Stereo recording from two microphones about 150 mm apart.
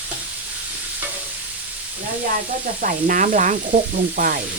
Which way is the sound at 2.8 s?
60° right (ahead or behind).